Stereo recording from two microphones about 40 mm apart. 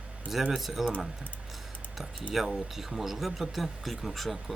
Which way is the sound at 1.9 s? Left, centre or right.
Centre.